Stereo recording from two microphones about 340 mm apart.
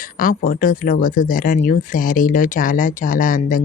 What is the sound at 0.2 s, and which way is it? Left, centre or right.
Speech, left.